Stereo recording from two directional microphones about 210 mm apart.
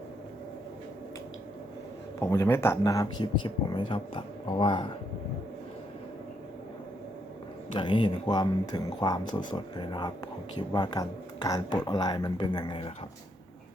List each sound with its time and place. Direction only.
2.2 s speech: 15° left (ahead or behind)
7.7 s speech: 25° left (ahead or behind)